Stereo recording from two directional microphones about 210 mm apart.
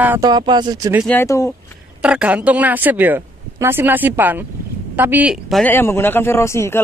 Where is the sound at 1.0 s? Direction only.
10° left (ahead or behind).